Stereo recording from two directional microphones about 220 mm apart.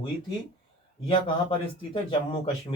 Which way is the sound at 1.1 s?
20° left (ahead or behind).